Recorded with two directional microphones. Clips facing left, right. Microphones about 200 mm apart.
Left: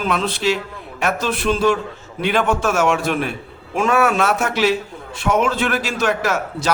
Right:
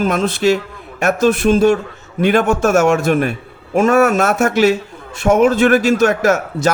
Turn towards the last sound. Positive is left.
turn(degrees=-45)  # may be behind; listen again after turning